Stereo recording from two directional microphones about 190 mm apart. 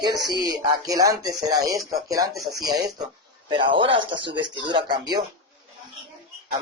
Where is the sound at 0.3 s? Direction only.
20° right (ahead or behind).